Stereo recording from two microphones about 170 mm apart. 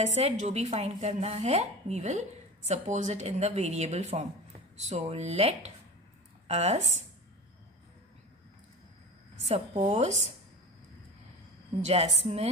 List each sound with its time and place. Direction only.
0.0 s speech: 40° right (ahead or behind)
9.5 s speech: 35° right (ahead or behind)
11.8 s speech: 40° right (ahead or behind)